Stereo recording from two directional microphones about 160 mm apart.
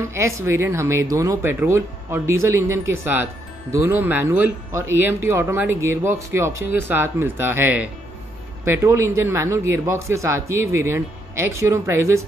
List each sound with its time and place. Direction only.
0.1 s speech: 15° right (ahead or behind)